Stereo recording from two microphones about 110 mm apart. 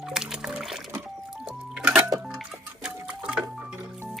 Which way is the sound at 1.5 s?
5° right (ahead or behind).